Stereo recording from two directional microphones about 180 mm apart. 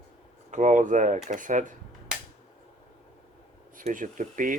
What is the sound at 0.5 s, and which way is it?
Speech, 45° right (ahead or behind).